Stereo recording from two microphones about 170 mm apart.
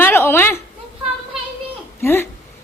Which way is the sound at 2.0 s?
15° left (ahead or behind).